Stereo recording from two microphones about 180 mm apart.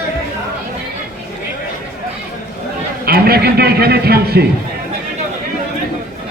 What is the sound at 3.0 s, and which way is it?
Speech, 60° right (ahead or behind).